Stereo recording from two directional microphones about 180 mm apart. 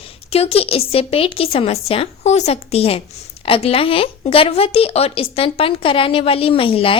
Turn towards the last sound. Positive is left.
turn(degrees=30)  # may be behind; listen again after turning